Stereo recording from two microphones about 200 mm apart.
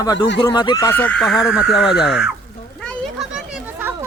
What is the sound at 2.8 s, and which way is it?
Children playing, centre (ahead or behind).